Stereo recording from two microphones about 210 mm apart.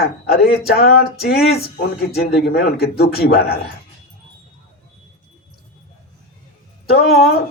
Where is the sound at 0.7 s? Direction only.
50° left (ahead or behind).